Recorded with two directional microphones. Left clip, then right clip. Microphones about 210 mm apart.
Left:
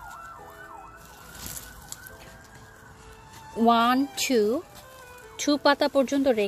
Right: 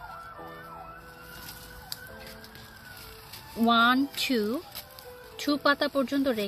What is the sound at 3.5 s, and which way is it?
A woman's voice, 5° left (ahead or behind).